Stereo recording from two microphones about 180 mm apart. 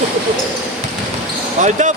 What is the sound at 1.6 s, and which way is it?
Speech, 40° right (ahead or behind).